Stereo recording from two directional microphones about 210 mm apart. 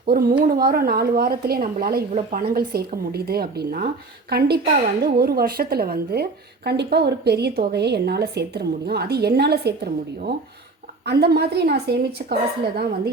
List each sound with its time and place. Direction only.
0.0 s a woman's voice: 45° right (ahead or behind)